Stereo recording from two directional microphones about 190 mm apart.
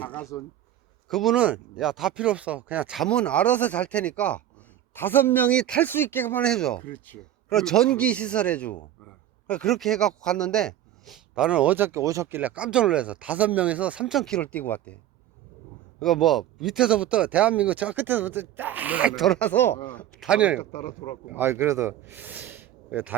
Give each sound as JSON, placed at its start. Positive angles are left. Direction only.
{"t": 0.1, "sound": "speech", "side_deg": 10}
{"t": 16.0, "sound": "speech", "side_deg": 0}
{"t": 20.2, "sound": "speech", "side_deg": -5}
{"t": 20.6, "sound": "speech", "side_deg": 35}
{"t": 21.3, "sound": "speech", "side_deg": -10}